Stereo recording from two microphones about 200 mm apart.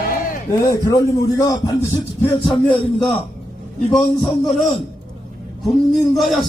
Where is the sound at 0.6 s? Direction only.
15° left (ahead or behind).